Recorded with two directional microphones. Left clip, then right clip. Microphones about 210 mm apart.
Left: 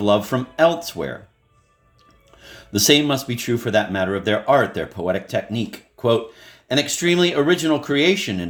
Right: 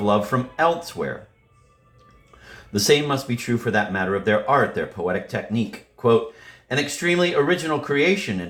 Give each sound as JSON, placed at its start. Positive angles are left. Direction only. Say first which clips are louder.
{"t": 0.0, "sound": "speech", "louder": "left 2 dB", "side_deg": 45}
{"t": 2.4, "sound": "speech", "louder": "left 4 dB", "side_deg": 45}